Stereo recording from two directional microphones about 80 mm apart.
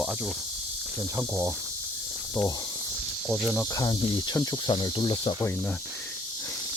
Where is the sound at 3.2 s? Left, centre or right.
Centre.